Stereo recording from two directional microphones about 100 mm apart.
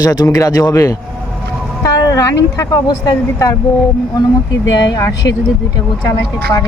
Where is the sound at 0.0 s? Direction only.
40° left (ahead or behind).